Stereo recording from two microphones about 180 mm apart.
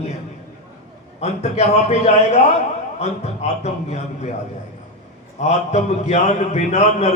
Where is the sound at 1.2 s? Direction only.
35° left (ahead or behind).